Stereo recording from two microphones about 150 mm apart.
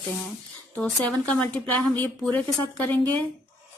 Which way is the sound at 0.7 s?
5° left (ahead or behind).